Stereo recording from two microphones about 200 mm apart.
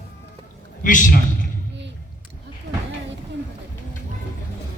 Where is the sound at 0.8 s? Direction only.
40° left (ahead or behind).